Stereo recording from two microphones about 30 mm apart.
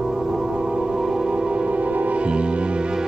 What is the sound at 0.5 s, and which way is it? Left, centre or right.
Music, right.